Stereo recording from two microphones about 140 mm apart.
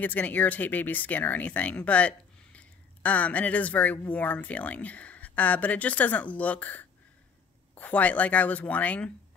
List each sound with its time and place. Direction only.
0.0 s speech: 10° left (ahead or behind)